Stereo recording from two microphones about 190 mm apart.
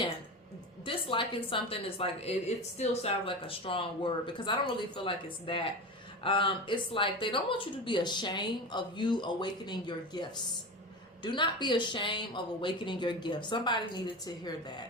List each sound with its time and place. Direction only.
0.9 s speech: 25° left (ahead or behind)